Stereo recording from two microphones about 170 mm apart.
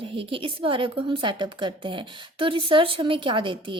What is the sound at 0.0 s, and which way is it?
A woman's voice, 30° right (ahead or behind).